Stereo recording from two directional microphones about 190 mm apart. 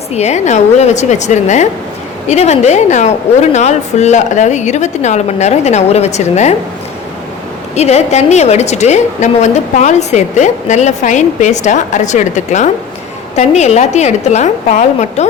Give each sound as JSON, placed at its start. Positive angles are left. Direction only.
{"t": 0.1, "sound": "a woman's voice", "side_deg": 35}
{"t": 7.8, "sound": "a woman's voice", "side_deg": 35}